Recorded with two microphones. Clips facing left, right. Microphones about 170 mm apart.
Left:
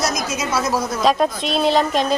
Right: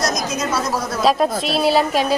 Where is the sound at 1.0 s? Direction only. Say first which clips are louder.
Right 2 dB; centre (ahead or behind).